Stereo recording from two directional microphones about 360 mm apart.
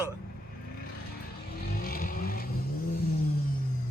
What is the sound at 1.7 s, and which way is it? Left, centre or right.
Vehicle, left.